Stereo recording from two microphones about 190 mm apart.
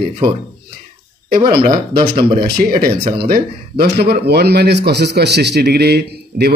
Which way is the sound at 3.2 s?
55° right (ahead or behind).